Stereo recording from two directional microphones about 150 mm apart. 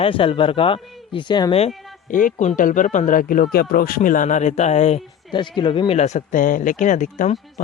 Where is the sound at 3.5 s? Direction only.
80° left; by 5.0 s 50° left (ahead or behind).